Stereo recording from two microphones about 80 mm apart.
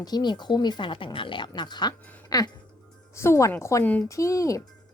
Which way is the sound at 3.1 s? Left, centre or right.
Left.